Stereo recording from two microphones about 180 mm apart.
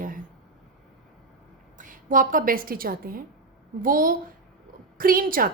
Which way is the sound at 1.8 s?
45° right (ahead or behind).